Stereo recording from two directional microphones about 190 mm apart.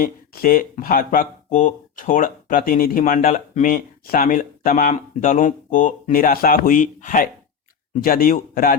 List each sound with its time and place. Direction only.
0.0 s speech: 50° left (ahead or behind)